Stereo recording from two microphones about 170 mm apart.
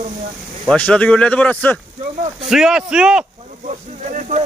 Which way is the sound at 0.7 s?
5° left (ahead or behind).